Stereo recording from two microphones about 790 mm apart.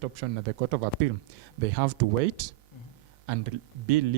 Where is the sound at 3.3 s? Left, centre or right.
Right.